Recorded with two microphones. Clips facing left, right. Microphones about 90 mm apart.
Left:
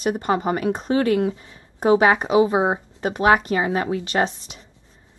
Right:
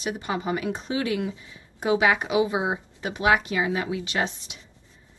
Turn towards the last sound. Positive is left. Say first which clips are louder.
# left 6 dB
turn(degrees=45)  # may be behind; listen again after turning